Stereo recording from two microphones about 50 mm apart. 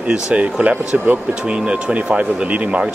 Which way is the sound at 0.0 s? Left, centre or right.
Right.